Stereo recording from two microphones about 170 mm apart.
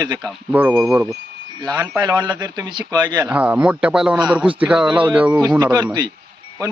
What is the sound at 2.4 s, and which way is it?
Speech, 25° right (ahead or behind).